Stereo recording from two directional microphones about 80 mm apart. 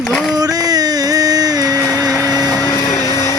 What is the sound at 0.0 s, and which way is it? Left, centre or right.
Speech, centre.